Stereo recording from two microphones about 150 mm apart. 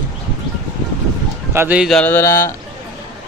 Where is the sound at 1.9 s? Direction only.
10° left (ahead or behind).